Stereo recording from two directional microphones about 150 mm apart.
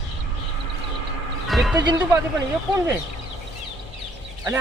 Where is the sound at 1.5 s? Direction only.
Centre (ahead or behind).